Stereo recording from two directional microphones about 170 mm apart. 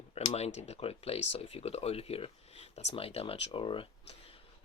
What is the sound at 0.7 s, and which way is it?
Speech, 35° left (ahead or behind).